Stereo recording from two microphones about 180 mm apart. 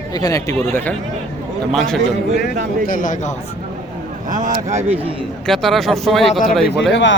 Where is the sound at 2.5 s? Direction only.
45° right (ahead or behind).